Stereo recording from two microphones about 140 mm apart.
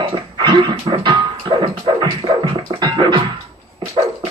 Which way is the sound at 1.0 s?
35° right (ahead or behind).